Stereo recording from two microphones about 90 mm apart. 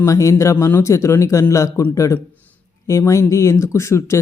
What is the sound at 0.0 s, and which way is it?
Speech, 35° left (ahead or behind).